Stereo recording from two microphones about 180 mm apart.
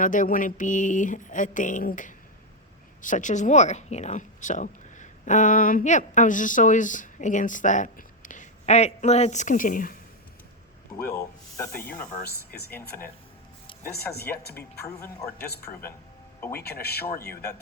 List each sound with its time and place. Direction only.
0.0 s a sound: 45° left (ahead or behind)
3.0 s speech: 45° left (ahead or behind)
11.1 s speech: 20° left (ahead or behind)
12.5 s speech: 65° left (ahead or behind)
13.9 s speech: 65° left (ahead or behind)
14.5 s speech: 10° left (ahead or behind)
16.5 s speech: 60° left (ahead or behind)